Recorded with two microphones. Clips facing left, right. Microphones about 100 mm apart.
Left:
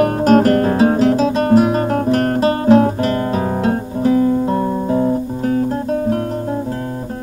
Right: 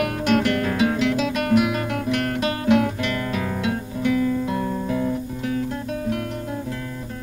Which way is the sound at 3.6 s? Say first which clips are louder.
Left 7 dB; 35° left (ahead or behind).